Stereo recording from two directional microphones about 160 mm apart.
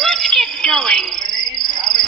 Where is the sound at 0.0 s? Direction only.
Centre (ahead or behind).